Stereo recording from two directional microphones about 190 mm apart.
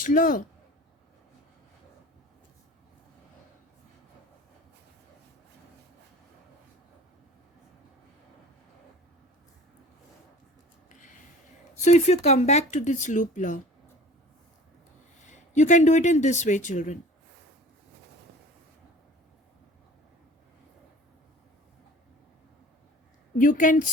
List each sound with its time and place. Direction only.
0.0 s speech: 45° left (ahead or behind)
11.8 s speech: 35° left (ahead or behind)
15.3 s speech: 40° left (ahead or behind)
23.4 s speech: 45° left (ahead or behind)